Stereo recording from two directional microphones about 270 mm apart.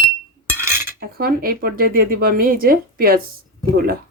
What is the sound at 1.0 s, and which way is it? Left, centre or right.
Speech, right.